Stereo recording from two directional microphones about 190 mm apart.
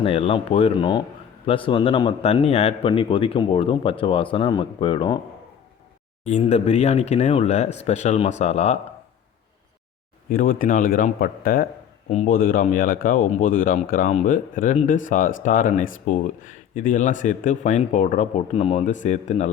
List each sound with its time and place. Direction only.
0.0 s speech: 30° left (ahead or behind)
6.2 s a man's voice: 35° left (ahead or behind)
10.2 s a man's voice: 45° left (ahead or behind)